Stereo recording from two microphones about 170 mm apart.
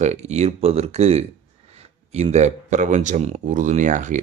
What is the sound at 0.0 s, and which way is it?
Speech, 40° right (ahead or behind).